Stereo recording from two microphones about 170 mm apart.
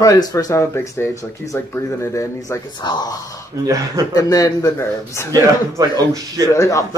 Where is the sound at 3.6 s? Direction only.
20° right (ahead or behind).